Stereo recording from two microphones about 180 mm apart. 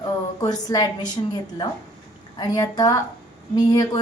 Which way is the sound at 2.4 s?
20° left (ahead or behind).